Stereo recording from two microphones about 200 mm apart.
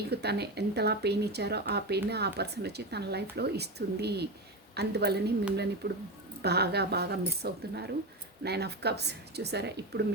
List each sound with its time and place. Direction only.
0.1 s a woman's voice: 55° right (ahead or behind)